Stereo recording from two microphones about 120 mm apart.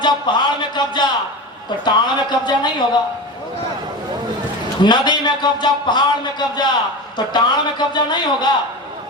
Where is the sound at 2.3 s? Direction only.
40° left (ahead or behind).